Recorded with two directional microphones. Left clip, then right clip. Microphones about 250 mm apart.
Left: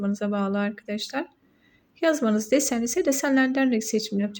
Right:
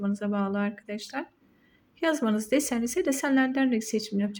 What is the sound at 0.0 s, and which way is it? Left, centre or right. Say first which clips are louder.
A woman's voice: left 3 dB; centre.